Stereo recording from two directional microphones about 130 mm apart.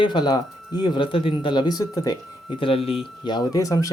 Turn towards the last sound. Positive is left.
turn(degrees=25)  # may be behind; listen again after turning